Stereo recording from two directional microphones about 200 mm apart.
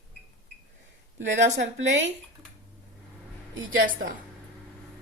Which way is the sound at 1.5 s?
65° right (ahead or behind).